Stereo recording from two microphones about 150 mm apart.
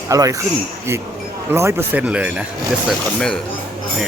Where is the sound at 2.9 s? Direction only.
5° left (ahead or behind).